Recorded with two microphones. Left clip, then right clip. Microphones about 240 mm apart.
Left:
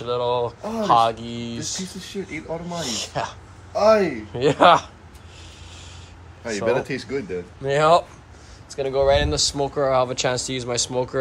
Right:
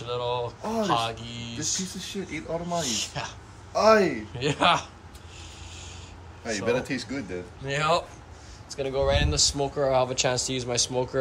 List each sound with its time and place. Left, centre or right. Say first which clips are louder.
0.0 s speech: left 7 dB; centre
6.6 s speech: left 5 dB; centre
7.6 s speech: left 8 dB; centre